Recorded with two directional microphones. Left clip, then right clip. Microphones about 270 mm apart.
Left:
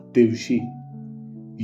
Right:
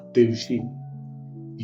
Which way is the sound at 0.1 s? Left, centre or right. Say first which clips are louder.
Left 1 dB; left.